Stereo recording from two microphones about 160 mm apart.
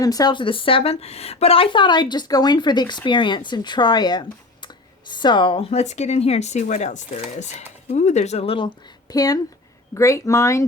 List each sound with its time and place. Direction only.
0.0 s speech: 25° left (ahead or behind)